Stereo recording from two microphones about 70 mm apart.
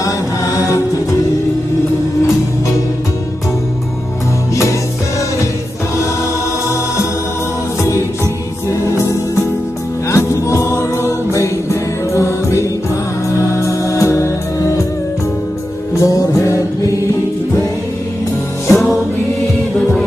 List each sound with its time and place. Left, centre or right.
0.0 s music: left
8.6 s music: left
15.9 s music: left
18.7 s music: centre